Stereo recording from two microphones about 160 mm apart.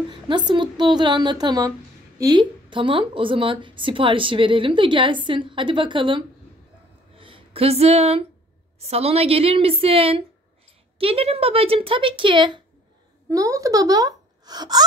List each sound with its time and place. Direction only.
0.1 s a woman's voice: 30° right (ahead or behind)